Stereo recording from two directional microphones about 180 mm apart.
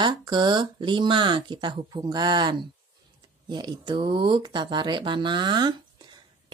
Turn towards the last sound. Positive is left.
turn(degrees=-25)  # may be behind; listen again after turning